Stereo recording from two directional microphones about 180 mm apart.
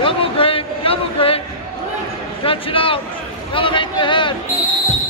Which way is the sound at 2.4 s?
30° left (ahead or behind).